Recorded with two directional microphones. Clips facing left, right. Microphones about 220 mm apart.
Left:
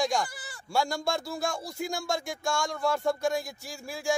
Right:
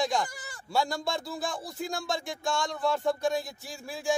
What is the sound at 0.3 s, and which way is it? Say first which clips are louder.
Bleat: right 1 dB; 45° right (ahead or behind).